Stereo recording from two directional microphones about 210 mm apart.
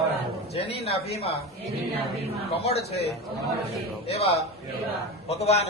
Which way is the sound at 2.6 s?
30° left (ahead or behind).